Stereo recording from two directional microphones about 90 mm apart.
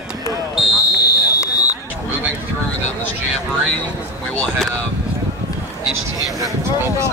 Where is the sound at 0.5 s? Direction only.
Centre (ahead or behind).